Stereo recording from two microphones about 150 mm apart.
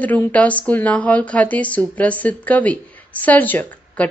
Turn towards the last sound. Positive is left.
turn(degrees=10)  # may be behind; listen again after turning